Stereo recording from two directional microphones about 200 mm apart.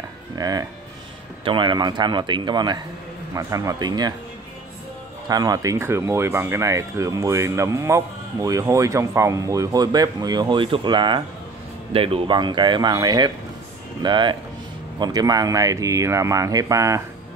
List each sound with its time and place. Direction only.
0.4 s speech: 20° right (ahead or behind)
5.3 s speech: 20° right (ahead or behind)